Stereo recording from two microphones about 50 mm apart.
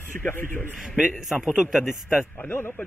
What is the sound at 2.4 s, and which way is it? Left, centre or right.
Speech, left.